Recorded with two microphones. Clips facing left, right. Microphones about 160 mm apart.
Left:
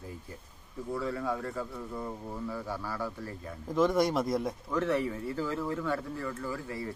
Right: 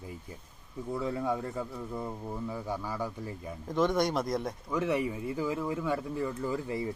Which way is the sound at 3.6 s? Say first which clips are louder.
Left 1 dB; centre (ahead or behind).